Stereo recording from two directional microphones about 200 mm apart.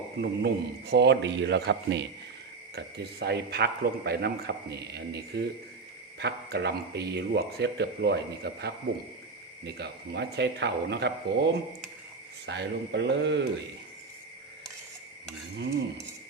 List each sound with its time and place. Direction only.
0.2 s speech: 55° right (ahead or behind)
12.5 s speech: 60° right (ahead or behind)